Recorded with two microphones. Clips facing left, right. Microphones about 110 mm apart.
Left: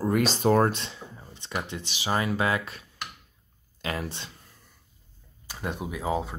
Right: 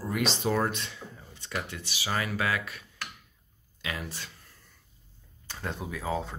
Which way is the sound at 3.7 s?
40° left (ahead or behind).